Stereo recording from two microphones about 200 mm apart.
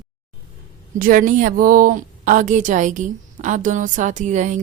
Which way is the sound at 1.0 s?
45° right (ahead or behind).